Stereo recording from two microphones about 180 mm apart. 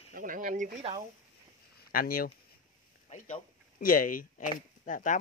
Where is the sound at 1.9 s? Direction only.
55° left (ahead or behind).